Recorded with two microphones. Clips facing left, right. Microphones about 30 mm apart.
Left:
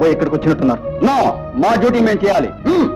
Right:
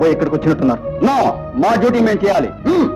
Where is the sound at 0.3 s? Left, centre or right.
Left.